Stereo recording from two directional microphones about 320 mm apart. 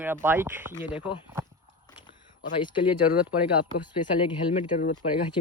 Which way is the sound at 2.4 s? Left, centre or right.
Centre.